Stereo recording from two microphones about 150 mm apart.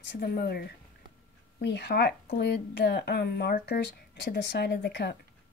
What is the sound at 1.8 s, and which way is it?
Speech, 90° left.